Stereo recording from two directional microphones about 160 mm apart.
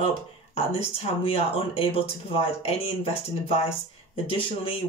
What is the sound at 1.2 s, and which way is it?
Speech, 35° left (ahead or behind).